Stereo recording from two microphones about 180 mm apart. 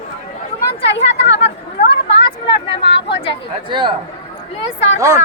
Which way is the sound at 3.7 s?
25° right (ahead or behind).